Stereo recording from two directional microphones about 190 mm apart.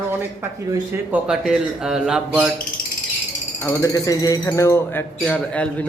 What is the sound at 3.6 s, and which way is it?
Speech, 15° left (ahead or behind).